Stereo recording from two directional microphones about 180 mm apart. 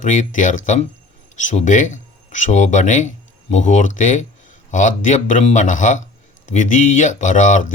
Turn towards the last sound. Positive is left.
turn(degrees=45)  # may be behind; listen again after turning